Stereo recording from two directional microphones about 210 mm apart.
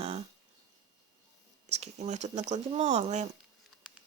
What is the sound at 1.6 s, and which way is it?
Speech, 35° right (ahead or behind).